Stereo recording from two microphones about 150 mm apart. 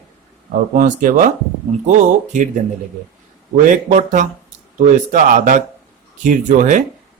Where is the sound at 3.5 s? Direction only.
60° right (ahead or behind).